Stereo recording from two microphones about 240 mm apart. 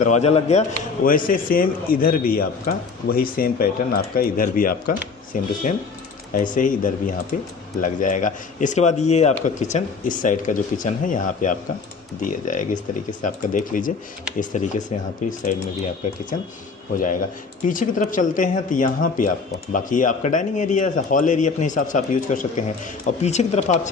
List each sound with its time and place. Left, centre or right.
0.0 s speech: left
1.3 s speech: left
17.7 s speech: left